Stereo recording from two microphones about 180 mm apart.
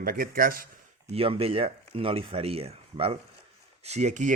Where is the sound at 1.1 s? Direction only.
30° right (ahead or behind).